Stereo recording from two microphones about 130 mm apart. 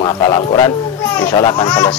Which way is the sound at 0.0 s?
35° left (ahead or behind).